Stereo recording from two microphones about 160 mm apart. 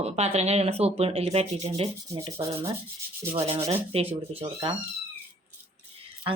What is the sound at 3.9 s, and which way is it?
Speech, 40° right (ahead or behind).